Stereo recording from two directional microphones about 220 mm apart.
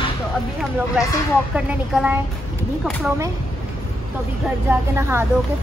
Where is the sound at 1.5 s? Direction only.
5° right (ahead or behind).